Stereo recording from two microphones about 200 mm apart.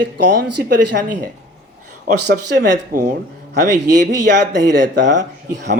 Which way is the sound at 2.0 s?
55° right (ahead or behind).